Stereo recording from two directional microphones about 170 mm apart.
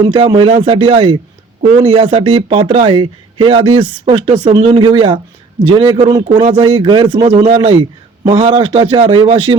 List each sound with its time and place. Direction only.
0.0 s a man's voice: 25° right (ahead or behind)